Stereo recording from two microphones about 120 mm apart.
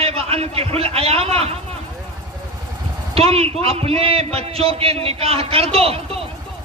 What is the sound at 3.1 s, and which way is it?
A man's voice, 55° right (ahead or behind).